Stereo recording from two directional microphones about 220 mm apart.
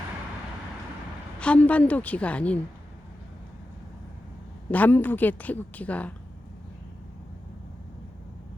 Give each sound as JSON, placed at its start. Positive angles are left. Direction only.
{"t": 1.4, "sound": "a woman's voice", "side_deg": 5}
{"t": 4.7, "sound": "a woman's voice", "side_deg": 5}